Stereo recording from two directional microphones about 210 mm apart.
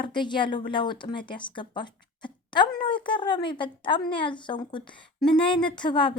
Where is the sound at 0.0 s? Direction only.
20° left (ahead or behind).